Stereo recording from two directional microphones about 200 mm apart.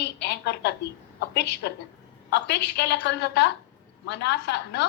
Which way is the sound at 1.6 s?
55° left (ahead or behind).